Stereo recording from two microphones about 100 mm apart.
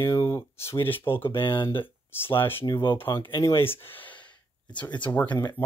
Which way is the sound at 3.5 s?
20° left (ahead or behind).